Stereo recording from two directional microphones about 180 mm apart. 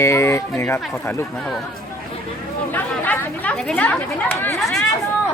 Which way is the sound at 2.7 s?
10° left (ahead or behind).